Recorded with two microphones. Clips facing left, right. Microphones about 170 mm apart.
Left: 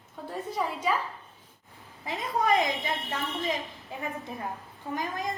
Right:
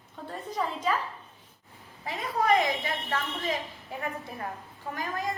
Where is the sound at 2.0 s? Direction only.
20° left (ahead or behind).